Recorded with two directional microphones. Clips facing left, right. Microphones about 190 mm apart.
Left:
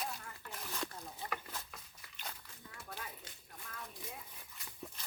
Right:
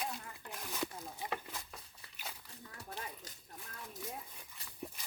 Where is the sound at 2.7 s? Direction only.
40° right (ahead or behind).